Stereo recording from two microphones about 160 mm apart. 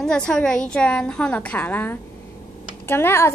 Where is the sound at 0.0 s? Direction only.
5° left (ahead or behind).